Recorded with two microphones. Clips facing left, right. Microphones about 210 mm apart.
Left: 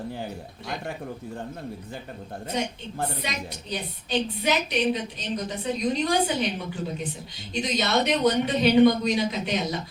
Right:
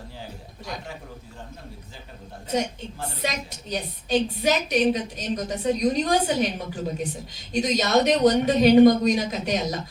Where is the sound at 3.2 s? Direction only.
45° right (ahead or behind).